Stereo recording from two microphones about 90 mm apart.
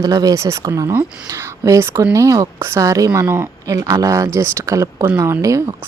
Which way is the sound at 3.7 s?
40° right (ahead or behind).